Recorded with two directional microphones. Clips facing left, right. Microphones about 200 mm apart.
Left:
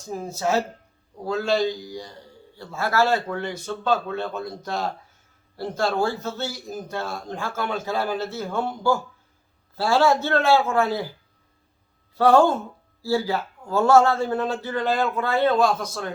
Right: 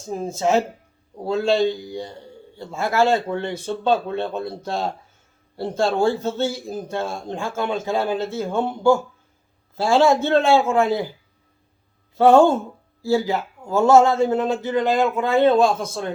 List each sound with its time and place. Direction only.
0.0 s a man's voice: 25° right (ahead or behind)
12.1 s a man's voice: 25° right (ahead or behind)
15.3 s a man's voice: 25° right (ahead or behind)